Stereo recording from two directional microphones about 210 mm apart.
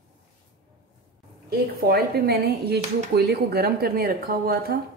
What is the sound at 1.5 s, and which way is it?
Speech, 45° right (ahead or behind).